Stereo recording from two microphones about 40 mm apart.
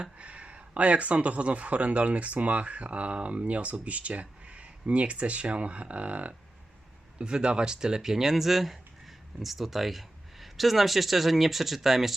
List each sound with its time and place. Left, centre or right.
0.2 s speech: right
7.2 s speech: right; by 12.1 s centre